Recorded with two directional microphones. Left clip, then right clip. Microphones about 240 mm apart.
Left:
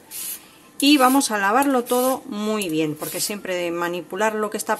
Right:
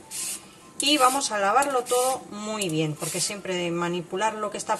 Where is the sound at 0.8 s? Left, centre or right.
Left.